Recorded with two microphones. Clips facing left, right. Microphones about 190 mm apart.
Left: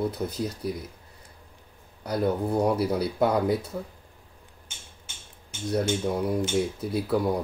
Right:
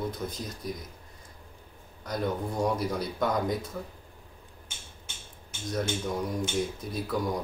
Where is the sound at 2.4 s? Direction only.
65° left (ahead or behind).